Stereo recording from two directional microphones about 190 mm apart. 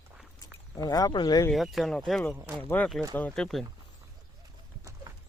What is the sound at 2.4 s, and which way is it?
Speech, 10° right (ahead or behind).